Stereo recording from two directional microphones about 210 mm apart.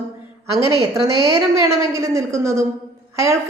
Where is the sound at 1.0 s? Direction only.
20° left (ahead or behind).